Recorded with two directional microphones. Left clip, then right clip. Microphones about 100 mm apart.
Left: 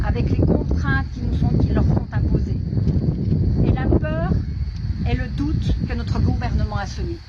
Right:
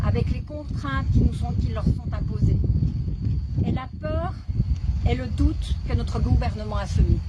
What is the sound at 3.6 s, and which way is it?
Speech, 30° right (ahead or behind).